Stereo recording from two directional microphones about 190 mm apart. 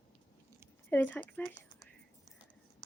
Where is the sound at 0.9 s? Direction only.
10° left (ahead or behind).